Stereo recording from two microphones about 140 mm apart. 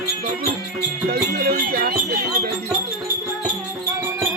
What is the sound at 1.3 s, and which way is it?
Music, 90° right.